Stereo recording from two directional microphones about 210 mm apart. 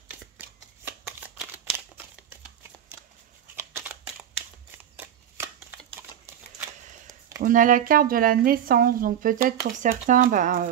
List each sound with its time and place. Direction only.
0.2 s shuffling cards: 10° right (ahead or behind)
3.5 s shuffling cards: 10° right (ahead or behind)
7.4 s speech: 40° right (ahead or behind)